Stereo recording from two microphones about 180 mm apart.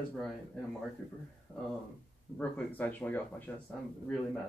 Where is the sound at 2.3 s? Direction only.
10° left (ahead or behind).